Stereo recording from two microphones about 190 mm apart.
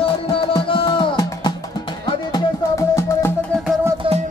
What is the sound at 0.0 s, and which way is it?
Music, 30° left (ahead or behind).